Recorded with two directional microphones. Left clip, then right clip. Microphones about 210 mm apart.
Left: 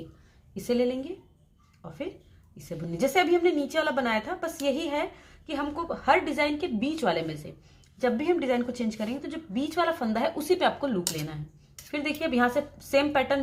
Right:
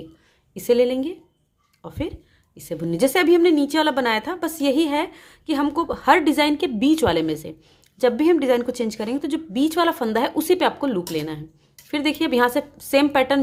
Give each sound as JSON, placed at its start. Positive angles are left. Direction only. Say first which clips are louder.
{"t": 0.5, "sound": "a woman's voice", "louder": "right 9 dB", "side_deg": -40}
{"t": 2.6, "sound": "a woman's voice", "louder": "right 8 dB", "side_deg": -40}